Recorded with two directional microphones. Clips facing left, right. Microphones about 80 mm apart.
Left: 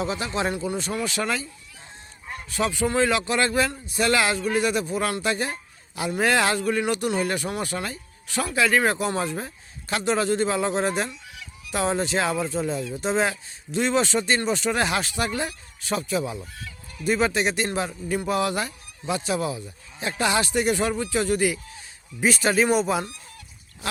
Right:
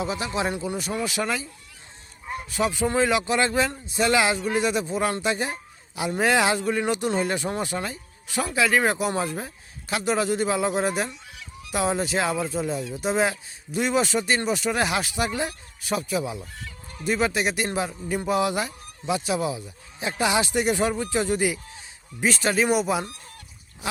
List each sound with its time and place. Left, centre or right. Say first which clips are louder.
0.0 s a man's voice: even; centre
8.5 s speech: left 1 dB; centre
22.2 s speech: left 2 dB; centre
23.8 s goat: even; centre